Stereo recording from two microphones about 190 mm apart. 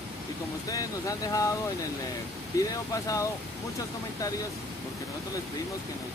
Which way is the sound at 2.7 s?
20° left (ahead or behind).